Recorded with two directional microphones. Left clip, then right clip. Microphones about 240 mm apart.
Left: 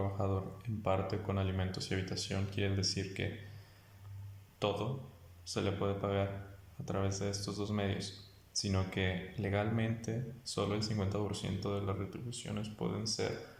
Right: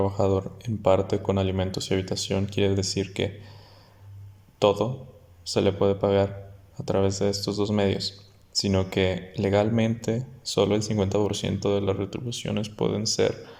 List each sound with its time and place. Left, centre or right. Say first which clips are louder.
0.0 s speech: right 14 dB; right
4.6 s speech: right 14 dB; right